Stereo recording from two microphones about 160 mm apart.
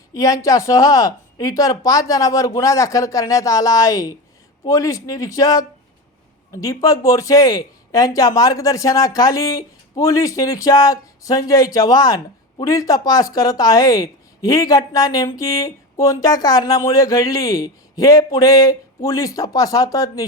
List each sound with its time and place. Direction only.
0.1 s speech: 20° left (ahead or behind)